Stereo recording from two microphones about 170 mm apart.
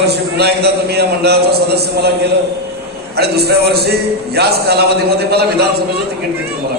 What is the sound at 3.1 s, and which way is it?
A man's voice, 70° right (ahead or behind).